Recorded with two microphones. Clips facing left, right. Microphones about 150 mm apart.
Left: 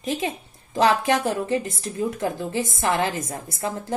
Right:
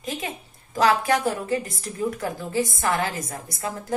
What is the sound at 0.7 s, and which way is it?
A woman's voice, 25° left (ahead or behind).